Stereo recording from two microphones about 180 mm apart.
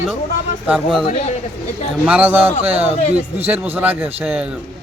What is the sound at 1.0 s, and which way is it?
Speech, 35° left (ahead or behind).